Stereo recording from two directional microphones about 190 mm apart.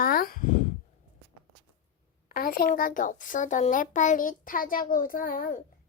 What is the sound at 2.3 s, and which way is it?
A child's voice, 50° left (ahead or behind).